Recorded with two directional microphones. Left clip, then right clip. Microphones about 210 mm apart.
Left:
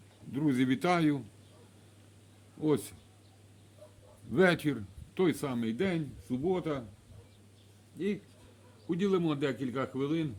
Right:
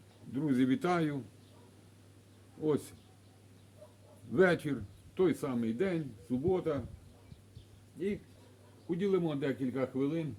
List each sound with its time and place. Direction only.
0.3 s speech: 50° left (ahead or behind)
2.6 s speech: 50° left (ahead or behind)
4.3 s speech: 50° left (ahead or behind)
8.9 s speech: 45° left (ahead or behind)